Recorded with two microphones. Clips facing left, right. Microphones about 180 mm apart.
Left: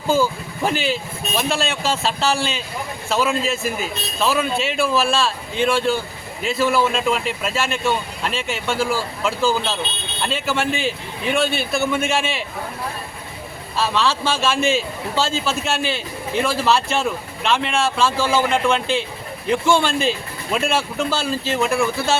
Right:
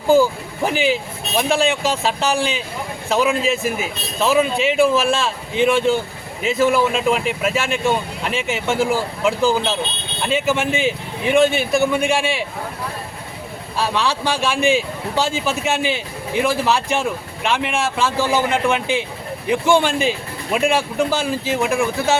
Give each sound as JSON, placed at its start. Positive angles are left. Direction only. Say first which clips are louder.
{"t": 0.1, "sound": "a man's voice", "louder": "right 5 dB", "side_deg": -15}
{"t": 13.7, "sound": "a man's voice", "louder": "even", "side_deg": -15}